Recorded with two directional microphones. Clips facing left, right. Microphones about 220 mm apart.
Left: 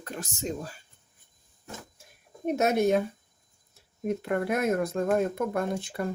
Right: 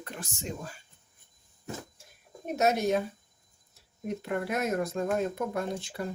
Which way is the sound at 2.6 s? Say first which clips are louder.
Left 2 dB; 55° left (ahead or behind).